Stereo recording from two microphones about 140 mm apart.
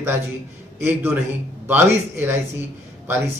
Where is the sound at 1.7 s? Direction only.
15° right (ahead or behind).